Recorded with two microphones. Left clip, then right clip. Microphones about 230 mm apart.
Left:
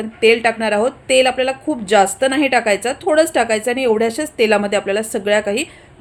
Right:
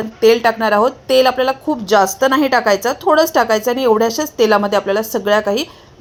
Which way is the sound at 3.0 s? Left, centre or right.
Centre.